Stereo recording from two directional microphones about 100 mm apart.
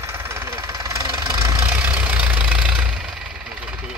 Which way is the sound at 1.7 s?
15° right (ahead or behind).